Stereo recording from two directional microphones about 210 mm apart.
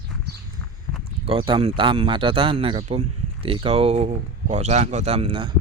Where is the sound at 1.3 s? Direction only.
25° right (ahead or behind).